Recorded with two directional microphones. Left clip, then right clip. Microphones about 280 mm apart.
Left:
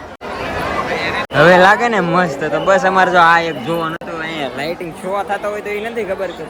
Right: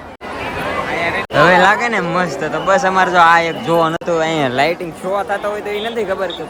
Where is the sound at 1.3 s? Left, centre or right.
Centre.